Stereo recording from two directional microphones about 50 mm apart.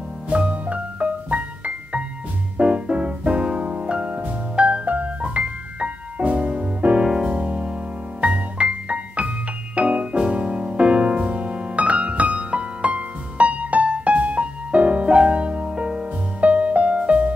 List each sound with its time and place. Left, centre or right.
0.3 s music: right
9.8 s piano: right